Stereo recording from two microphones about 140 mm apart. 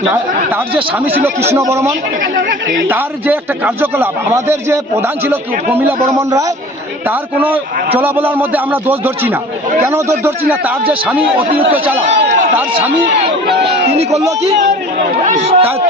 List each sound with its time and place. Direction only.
1.5 s a man's voice: 20° right (ahead or behind)
2.5 s speech: 75° right (ahead or behind)
2.9 s a man's voice: 15° right (ahead or behind)
7.1 s a man's voice: 15° right (ahead or behind)
15.3 s a man's voice: 55° right (ahead or behind)